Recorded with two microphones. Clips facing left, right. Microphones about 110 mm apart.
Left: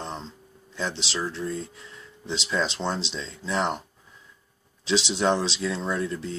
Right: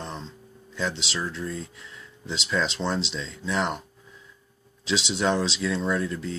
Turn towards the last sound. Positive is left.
turn(degrees=25)  # may be behind; listen again after turning